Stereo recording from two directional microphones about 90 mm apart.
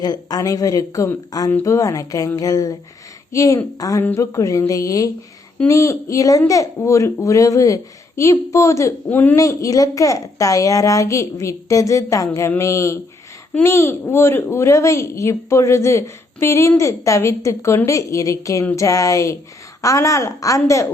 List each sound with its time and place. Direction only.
0.0 s speech: 45° left (ahead or behind)
9.0 s a woman's voice: 20° left (ahead or behind)
9.3 s speech: 40° left (ahead or behind)